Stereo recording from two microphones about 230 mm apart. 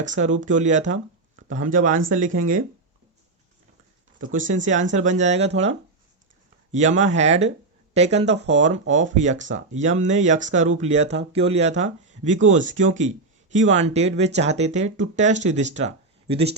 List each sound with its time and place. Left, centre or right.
0.4 s speech: right
4.2 s speech: right
4.6 s speech: right
6.7 s speech: right